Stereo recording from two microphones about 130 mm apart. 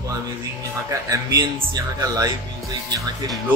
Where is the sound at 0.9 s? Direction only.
25° right (ahead or behind).